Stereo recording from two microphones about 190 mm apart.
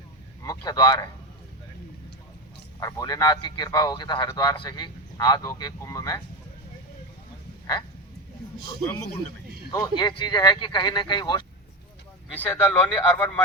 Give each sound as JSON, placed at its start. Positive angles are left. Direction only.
{"t": 0.4, "sound": "speech", "side_deg": 20}
{"t": 2.8, "sound": "speech", "side_deg": 20}
{"t": 9.7, "sound": "speech", "side_deg": 20}
{"t": 12.4, "sound": "speech", "side_deg": 10}